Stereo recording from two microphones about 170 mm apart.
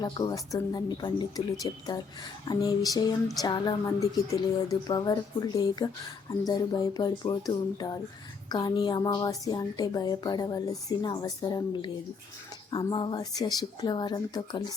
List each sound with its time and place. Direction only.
0.0 s a woman's voice: 25° left (ahead or behind)